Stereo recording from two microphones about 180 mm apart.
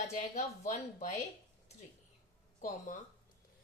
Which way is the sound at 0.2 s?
40° left (ahead or behind).